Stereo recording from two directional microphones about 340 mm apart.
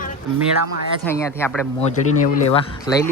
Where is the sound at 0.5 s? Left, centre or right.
Right.